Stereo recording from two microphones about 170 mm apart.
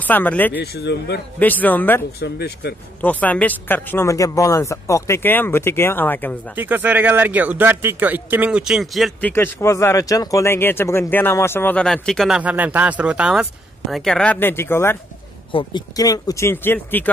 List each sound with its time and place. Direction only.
0.0 s speech: 10° left (ahead or behind)
0.6 s speech: 75° left (ahead or behind)
1.4 s speech: 10° left (ahead or behind)
2.1 s speech: 70° left (ahead or behind)
3.0 s speech: 10° left (ahead or behind)
6.5 s speech: 10° right (ahead or behind)
9.3 s speech: 15° left (ahead or behind)
15.5 s speech: 25° left (ahead or behind)